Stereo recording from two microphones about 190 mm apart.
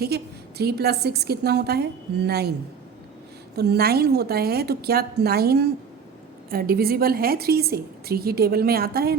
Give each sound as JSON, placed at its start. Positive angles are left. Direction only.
{"t": 0.0, "sound": "a woman's voice", "side_deg": -60}
{"t": 3.5, "sound": "a woman's voice", "side_deg": -60}